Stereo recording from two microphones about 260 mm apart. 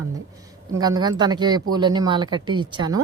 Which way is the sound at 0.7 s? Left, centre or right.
Centre.